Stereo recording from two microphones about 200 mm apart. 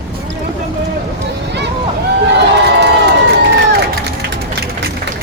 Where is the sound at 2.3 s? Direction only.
60° right (ahead or behind).